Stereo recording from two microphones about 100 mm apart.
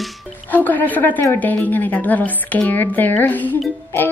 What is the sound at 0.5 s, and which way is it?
Speech, 20° left (ahead or behind).